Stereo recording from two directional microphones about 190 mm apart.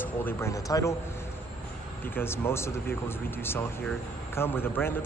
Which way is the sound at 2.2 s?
15° left (ahead or behind).